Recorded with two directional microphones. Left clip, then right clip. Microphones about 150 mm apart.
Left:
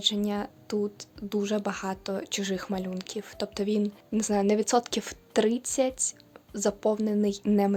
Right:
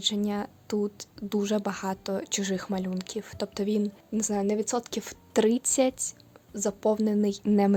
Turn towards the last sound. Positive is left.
turn(degrees=-20)  # may be behind; listen again after turning